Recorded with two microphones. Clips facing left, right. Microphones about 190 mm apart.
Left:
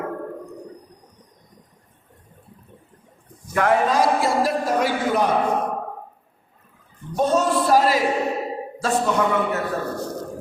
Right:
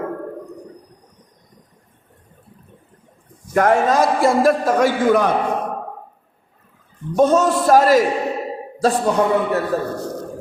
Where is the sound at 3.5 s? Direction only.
45° right (ahead or behind).